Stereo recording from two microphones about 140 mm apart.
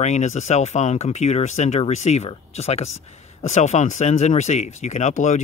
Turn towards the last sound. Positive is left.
turn(degrees=60)  # may be behind; listen again after turning